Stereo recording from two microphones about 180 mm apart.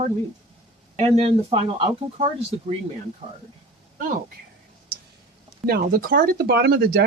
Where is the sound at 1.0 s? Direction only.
35° right (ahead or behind).